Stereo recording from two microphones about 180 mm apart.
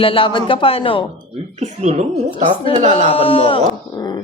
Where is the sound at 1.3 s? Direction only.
40° right (ahead or behind).